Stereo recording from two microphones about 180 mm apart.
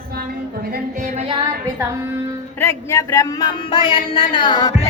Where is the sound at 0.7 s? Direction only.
45° right (ahead or behind).